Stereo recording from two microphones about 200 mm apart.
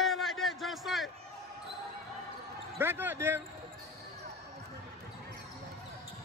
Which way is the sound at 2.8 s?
10° right (ahead or behind).